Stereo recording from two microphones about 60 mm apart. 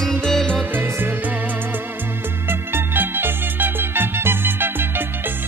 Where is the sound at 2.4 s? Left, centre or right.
Right.